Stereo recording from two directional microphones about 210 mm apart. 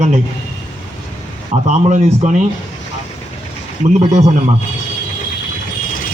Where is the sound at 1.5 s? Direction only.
35° right (ahead or behind).